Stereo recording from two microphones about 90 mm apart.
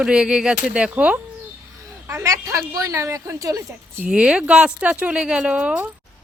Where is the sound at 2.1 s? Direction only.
35° right (ahead or behind).